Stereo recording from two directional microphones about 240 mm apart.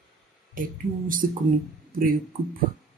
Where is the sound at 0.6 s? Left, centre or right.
Right.